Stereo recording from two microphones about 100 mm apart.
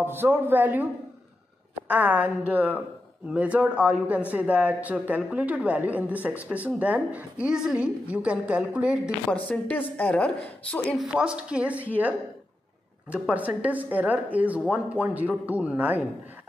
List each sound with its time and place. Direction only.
0.0 s speech: 20° right (ahead or behind)
1.9 s a man's voice: 15° right (ahead or behind)
9.3 s a woman's voice: 15° left (ahead or behind)
11.0 s a man's voice: 10° right (ahead or behind)